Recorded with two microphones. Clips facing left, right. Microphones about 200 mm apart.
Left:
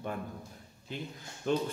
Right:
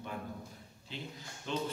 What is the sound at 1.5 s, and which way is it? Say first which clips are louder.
Speech: left 7 dB; 50° left (ahead or behind).